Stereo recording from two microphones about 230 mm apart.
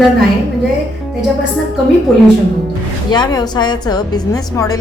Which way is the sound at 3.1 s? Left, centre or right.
Centre.